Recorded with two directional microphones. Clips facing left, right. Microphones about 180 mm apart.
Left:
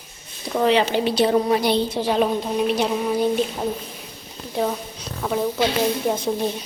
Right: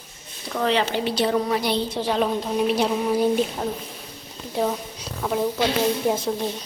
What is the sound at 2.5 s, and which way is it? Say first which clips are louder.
Speech: right 1 dB; 5° right (ahead or behind).